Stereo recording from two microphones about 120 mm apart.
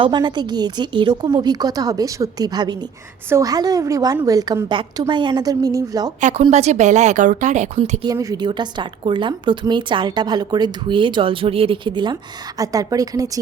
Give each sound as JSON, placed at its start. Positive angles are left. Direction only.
{"t": 0.0, "sound": "a woman's voice", "side_deg": -40}
{"t": 4.7, "sound": "a woman's voice", "side_deg": -40}
{"t": 6.1, "sound": "speech", "side_deg": -90}
{"t": 6.5, "sound": "a woman's voice", "side_deg": -70}
{"t": 8.0, "sound": "speech", "side_deg": -30}
{"t": 8.4, "sound": "a woman's voice", "side_deg": -40}
{"t": 12.5, "sound": "speech", "side_deg": -30}